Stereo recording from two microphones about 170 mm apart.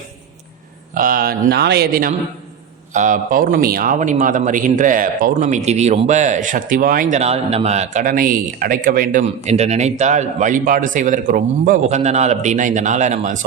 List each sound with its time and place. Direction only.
0.9 s a man's voice: 55° right (ahead or behind)
7.2 s a man's voice: 35° right (ahead or behind)
8.0 s speech: 55° right (ahead or behind)
9.2 s a man's voice: 40° right (ahead or behind)